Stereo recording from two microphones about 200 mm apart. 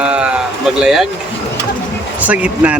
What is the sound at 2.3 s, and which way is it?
Speech, 5° right (ahead or behind).